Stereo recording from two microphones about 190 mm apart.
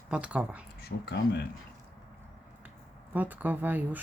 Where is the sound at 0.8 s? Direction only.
60° left (ahead or behind).